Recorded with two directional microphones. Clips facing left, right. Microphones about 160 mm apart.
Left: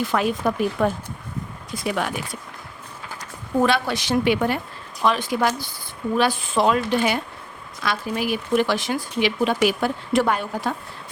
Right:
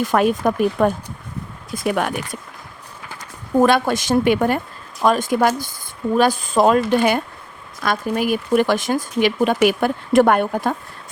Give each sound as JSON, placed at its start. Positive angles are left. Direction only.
{"t": 0.0, "sound": "speech", "side_deg": -50}
{"t": 3.6, "sound": "speech", "side_deg": -50}